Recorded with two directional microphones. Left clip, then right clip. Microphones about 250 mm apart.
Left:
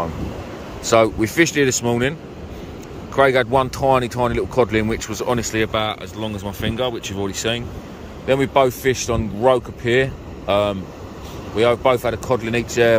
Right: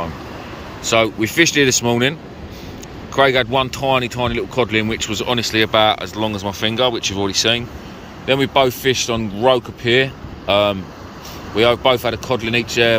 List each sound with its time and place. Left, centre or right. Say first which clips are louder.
0.8 s speech: left 1 dB; left
3.2 s speech: right 1 dB; centre